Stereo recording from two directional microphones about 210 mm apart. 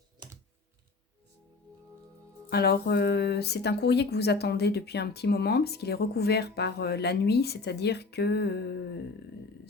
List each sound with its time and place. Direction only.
2.5 s speech: 50° left (ahead or behind)